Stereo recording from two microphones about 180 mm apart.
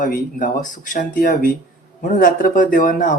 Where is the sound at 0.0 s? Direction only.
50° left (ahead or behind).